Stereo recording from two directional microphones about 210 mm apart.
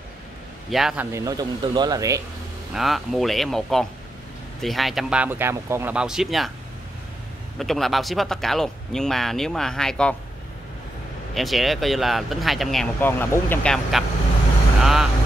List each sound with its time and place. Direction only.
0.7 s speech: centre (ahead or behind)
1.1 s speech: 15° right (ahead or behind)
2.7 s speech: centre (ahead or behind)
7.5 s speech: centre (ahead or behind)
11.3 s speech: centre (ahead or behind)
14.8 s vehicle: centre (ahead or behind)